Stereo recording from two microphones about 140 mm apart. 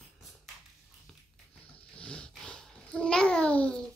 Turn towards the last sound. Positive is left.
turn(degrees=10)  # may be behind; listen again after turning